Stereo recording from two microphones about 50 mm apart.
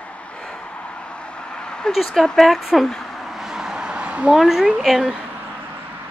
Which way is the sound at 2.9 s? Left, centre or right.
Centre.